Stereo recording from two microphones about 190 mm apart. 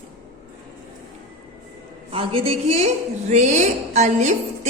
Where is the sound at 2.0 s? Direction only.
30° right (ahead or behind).